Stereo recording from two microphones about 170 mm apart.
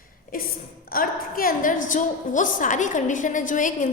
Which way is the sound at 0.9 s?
55° left (ahead or behind).